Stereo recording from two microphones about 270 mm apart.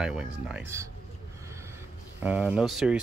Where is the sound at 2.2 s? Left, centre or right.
Centre.